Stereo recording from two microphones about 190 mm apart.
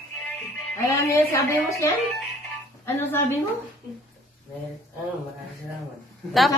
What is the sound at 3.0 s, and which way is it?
Speech, 10° left (ahead or behind).